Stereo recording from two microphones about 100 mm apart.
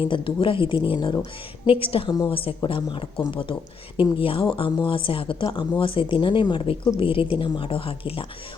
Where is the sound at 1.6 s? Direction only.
65° left (ahead or behind).